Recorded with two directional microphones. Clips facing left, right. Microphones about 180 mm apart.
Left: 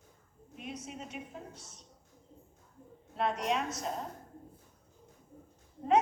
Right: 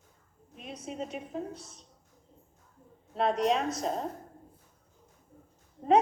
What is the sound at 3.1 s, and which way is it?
Speech, 30° right (ahead or behind).